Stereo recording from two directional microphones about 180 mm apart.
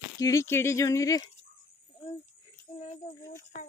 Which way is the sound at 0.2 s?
15° left (ahead or behind).